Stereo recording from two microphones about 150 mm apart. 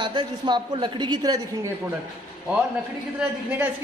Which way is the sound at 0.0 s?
30° right (ahead or behind).